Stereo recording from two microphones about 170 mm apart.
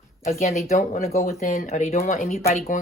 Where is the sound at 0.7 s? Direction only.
45° left (ahead or behind).